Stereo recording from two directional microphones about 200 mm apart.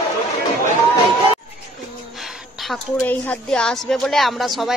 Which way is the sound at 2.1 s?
Centre (ahead or behind).